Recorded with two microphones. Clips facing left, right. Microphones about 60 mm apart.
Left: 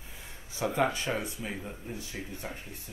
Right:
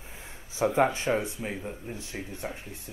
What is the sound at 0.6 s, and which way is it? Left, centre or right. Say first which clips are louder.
Speech: right 4 dB; right.